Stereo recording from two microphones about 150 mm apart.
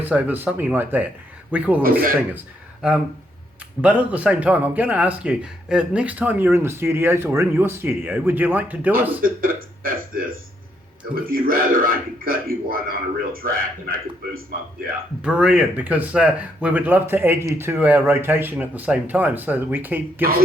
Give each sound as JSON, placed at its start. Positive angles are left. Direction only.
{"t": 0.0, "sound": "speech", "side_deg": -10}
{"t": 1.8, "sound": "a man's voice", "side_deg": -75}
{"t": 3.8, "sound": "speech", "side_deg": -10}
{"t": 8.9, "sound": "a man's voice", "side_deg": -70}
{"t": 15.2, "sound": "speech", "side_deg": -5}